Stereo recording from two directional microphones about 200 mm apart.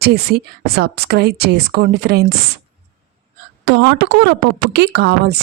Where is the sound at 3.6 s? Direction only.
55° right (ahead or behind).